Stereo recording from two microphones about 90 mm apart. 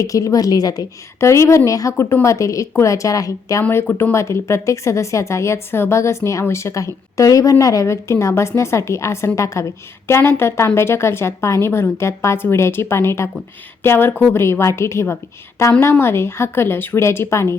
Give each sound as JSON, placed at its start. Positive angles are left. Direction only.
{"t": 0.0, "sound": "a woman's voice", "side_deg": 40}
{"t": 1.2, "sound": "a woman's voice", "side_deg": 35}
{"t": 3.6, "sound": "a woman's voice", "side_deg": 25}
{"t": 14.4, "sound": "a woman's voice", "side_deg": 30}